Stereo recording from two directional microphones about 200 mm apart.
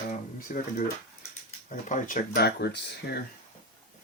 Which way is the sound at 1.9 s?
40° left (ahead or behind).